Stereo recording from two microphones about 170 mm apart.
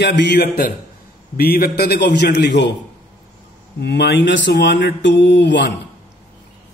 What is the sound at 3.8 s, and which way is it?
A man's voice, 85° left.